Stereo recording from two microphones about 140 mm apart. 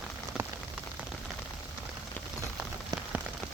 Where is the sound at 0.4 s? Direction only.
5° right (ahead or behind).